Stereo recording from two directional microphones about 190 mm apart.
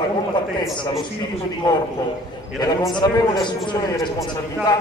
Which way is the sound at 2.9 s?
25° left (ahead or behind).